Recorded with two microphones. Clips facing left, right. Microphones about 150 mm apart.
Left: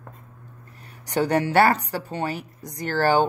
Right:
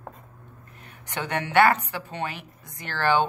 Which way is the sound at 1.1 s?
35° left (ahead or behind).